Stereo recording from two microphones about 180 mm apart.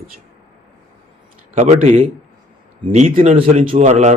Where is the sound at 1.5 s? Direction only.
40° right (ahead or behind).